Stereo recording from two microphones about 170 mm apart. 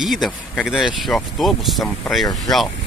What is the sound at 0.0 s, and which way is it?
Speech, centre (ahead or behind).